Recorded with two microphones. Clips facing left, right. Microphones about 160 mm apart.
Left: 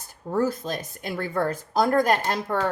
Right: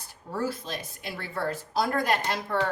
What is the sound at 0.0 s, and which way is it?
Speech, 45° left (ahead or behind).